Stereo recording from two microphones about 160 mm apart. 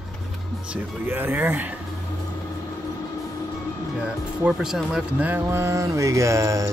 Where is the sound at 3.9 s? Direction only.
5° right (ahead or behind).